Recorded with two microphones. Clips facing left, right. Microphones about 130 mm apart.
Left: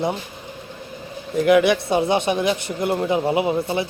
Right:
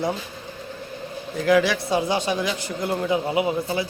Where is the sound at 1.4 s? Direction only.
20° left (ahead or behind).